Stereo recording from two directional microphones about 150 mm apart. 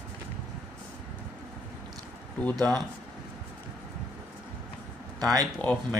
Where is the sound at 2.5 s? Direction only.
25° right (ahead or behind).